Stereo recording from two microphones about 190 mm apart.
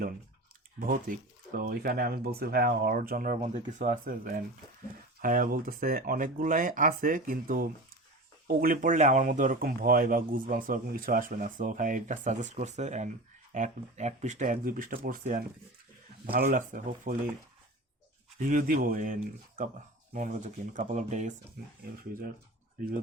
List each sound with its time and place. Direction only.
0.9 s speech: 45° right (ahead or behind)
18.3 s speech: 40° right (ahead or behind)